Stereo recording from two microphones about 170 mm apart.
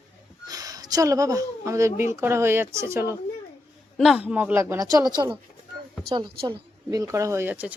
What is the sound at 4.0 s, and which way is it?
Speech, 5° right (ahead or behind).